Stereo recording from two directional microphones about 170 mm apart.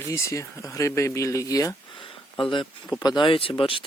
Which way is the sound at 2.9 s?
25° left (ahead or behind).